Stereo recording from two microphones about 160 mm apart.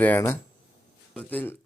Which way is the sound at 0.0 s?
10° left (ahead or behind).